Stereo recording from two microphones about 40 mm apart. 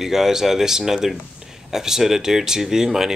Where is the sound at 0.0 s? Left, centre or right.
Centre.